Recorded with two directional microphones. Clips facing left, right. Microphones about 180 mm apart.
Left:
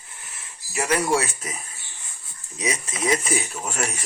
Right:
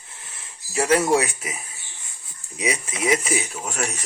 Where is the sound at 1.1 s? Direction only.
10° right (ahead or behind).